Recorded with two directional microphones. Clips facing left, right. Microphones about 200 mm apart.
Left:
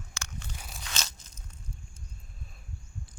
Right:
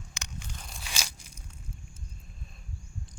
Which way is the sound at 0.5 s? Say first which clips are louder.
Even; 5° left (ahead or behind).